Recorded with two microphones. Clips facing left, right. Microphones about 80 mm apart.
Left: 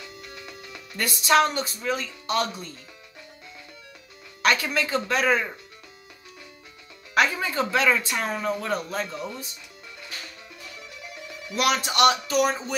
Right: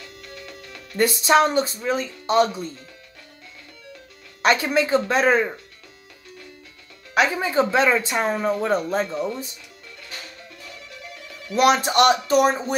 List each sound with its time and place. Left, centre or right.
0.0 s music: centre
0.9 s speech: right
4.4 s speech: right
7.2 s speech: right
11.5 s speech: right